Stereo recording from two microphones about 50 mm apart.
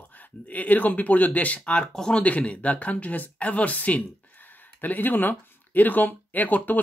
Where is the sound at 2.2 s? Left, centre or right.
Left.